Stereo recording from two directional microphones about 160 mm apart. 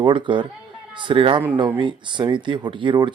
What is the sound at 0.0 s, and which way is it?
A man's voice, 30° right (ahead or behind).